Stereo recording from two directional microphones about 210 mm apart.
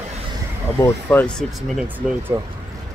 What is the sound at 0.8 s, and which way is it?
Speech, 10° left (ahead or behind).